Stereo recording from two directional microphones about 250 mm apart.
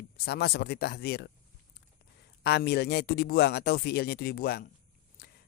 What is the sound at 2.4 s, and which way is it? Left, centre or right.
Speech, left.